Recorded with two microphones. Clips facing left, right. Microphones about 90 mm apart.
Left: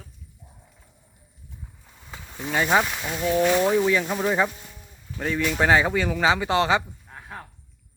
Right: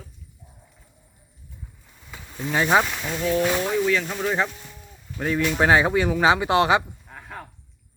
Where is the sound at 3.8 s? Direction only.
15° left (ahead or behind).